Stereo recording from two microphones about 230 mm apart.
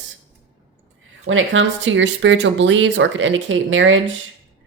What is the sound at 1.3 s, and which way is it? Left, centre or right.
Speech, right.